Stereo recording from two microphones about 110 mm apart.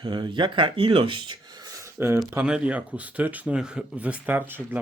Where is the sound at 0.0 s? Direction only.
50° right (ahead or behind).